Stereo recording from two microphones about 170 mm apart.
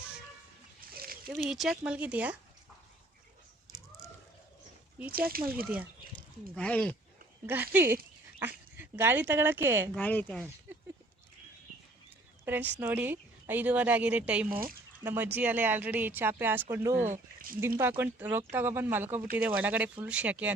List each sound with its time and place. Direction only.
0.8 s a sound: 60° right (ahead or behind)
1.5 s speech: centre (ahead or behind)
5.3 s speech: 60° right (ahead or behind)
6.1 s speech: 5° left (ahead or behind)
7.4 s speech: 10° right (ahead or behind)
9.9 s speech: 10° left (ahead or behind)
12.5 s speech: 10° right (ahead or behind)
14.5 s speech: 60° right (ahead or behind)
15.0 s speech: 10° right (ahead or behind)
17.1 s speech: 55° right (ahead or behind)
17.7 s speech: 15° right (ahead or behind)